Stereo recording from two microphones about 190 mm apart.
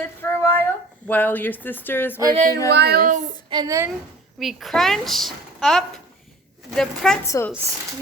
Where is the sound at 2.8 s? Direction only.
55° right (ahead or behind).